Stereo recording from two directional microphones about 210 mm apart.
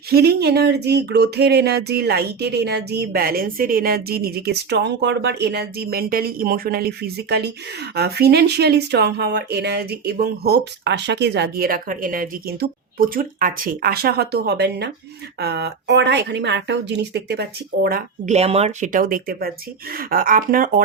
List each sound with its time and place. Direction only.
0.1 s speech: 50° right (ahead or behind)
18.3 s speech: 30° right (ahead or behind)